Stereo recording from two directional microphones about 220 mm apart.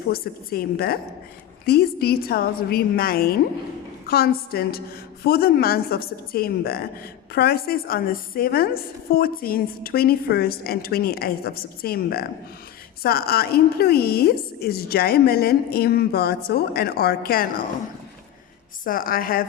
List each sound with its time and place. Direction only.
0.1 s a woman's voice: 45° left (ahead or behind)
18.9 s a woman's voice: 40° left (ahead or behind)